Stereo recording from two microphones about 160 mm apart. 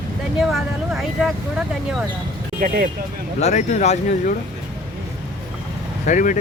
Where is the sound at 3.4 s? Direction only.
45° left (ahead or behind).